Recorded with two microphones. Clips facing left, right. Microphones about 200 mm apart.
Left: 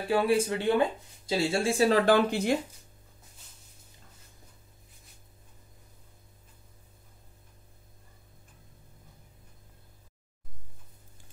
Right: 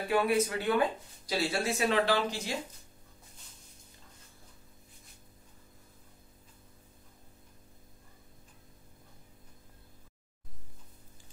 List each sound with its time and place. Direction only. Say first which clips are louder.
0.1 s speech: left 3 dB; 30° left (ahead or behind)
2.1 s speech: left 8 dB; 55° left (ahead or behind)